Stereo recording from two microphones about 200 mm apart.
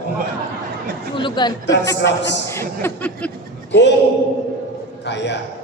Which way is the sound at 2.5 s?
10° left (ahead or behind).